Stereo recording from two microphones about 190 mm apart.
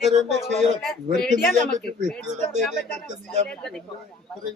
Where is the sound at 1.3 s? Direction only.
40° right (ahead or behind).